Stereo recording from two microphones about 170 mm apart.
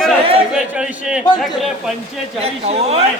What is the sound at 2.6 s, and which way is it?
Speech, 35° right (ahead or behind).